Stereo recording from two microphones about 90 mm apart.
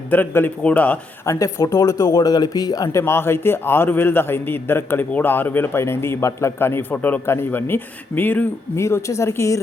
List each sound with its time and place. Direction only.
0.1 s speech: 20° left (ahead or behind)
1.2 s speech: 35° left (ahead or behind)
3.0 s a man's voice: 25° left (ahead or behind)
8.8 s a woman's voice: 35° left (ahead or behind)